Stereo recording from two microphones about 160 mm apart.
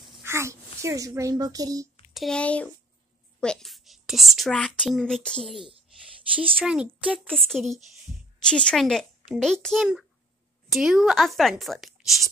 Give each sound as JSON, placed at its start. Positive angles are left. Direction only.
{"t": 0.2, "sound": "a woman's voice", "side_deg": -15}
{"t": 2.1, "sound": "a woman's voice", "side_deg": 5}